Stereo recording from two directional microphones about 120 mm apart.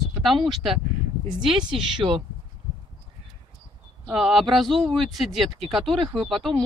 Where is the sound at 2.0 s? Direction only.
25° right (ahead or behind).